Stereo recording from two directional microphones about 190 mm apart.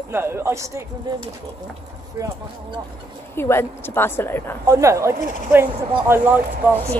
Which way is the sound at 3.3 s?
10° left (ahead or behind).